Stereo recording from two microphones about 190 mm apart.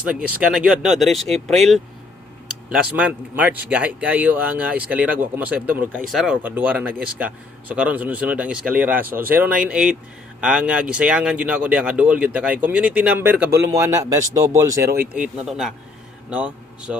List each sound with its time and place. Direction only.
0.0 s speech: 5° right (ahead or behind)
14.9 s a man's voice: 5° right (ahead or behind)